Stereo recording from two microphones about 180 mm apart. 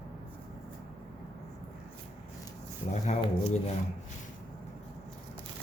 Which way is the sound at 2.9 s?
40° left (ahead or behind).